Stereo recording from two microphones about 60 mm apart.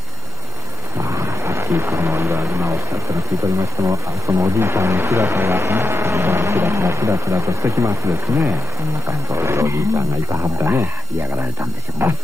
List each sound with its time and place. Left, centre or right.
0.9 s vehicle: right
4.3 s vehicle: right
12.0 s speech: right